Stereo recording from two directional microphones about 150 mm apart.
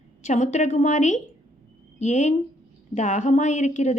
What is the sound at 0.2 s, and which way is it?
Speech, 50° left (ahead or behind).